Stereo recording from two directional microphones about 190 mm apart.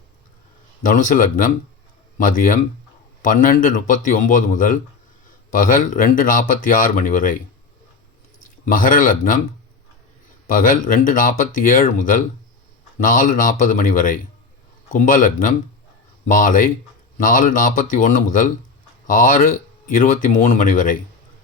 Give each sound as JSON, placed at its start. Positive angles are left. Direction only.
{"t": 0.8, "sound": "speech", "side_deg": 45}
{"t": 8.4, "sound": "speech", "side_deg": 45}
{"t": 10.5, "sound": "speech", "side_deg": 45}